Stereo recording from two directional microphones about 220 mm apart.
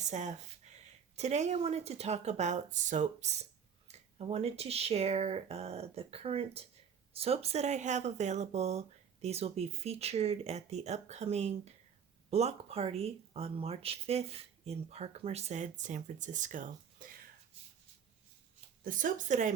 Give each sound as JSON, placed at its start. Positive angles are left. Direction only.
{"t": 0.0, "sound": "speech", "side_deg": -35}
{"t": 18.9, "sound": "speech", "side_deg": -35}